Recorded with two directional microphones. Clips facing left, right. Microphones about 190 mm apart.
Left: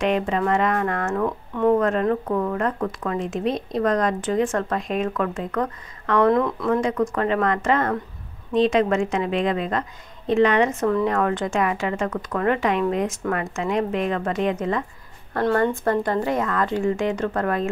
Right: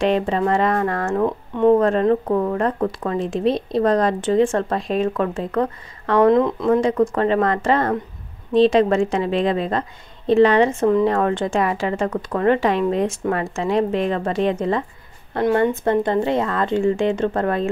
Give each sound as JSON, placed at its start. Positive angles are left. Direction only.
{"t": 0.0, "sound": "speech", "side_deg": -30}
{"t": 1.2, "sound": "speech", "side_deg": -20}
{"t": 15.3, "sound": "speech", "side_deg": -20}